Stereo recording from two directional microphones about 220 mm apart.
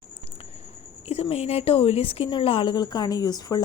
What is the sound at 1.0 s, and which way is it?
Speech, 30° left (ahead or behind).